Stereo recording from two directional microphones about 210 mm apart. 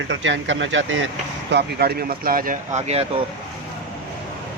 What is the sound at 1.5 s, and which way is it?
Speech, 50° right (ahead or behind).